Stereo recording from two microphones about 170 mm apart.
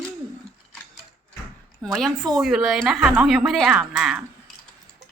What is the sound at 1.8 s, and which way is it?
Speech, centre (ahead or behind).